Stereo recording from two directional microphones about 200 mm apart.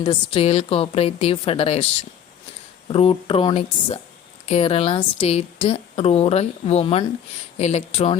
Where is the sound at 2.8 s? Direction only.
25° left (ahead or behind).